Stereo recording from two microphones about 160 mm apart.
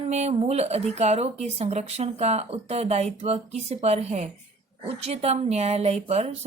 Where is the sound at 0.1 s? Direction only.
45° right (ahead or behind).